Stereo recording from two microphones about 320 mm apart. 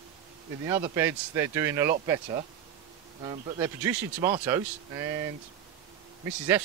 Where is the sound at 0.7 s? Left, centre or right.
Centre.